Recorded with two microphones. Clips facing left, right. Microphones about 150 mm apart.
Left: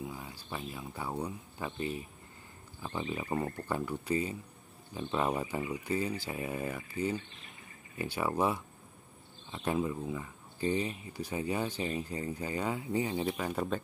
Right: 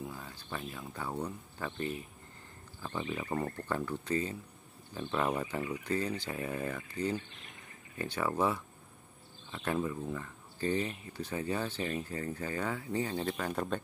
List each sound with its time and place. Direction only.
0.0 s speech: 10° left (ahead or behind)